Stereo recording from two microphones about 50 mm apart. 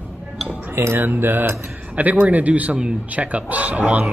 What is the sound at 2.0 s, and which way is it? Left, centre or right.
Speech, right.